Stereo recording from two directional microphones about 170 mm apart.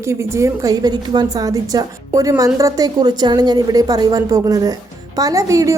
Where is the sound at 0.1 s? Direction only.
15° right (ahead or behind).